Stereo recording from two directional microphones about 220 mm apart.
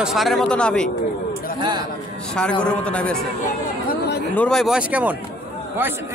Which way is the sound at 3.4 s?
40° left (ahead or behind).